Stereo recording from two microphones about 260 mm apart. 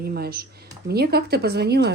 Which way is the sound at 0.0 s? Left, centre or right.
Right.